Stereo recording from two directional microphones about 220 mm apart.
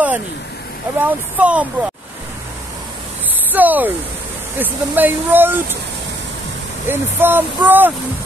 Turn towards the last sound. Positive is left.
turn(degrees=-10)  # may be behind; listen again after turning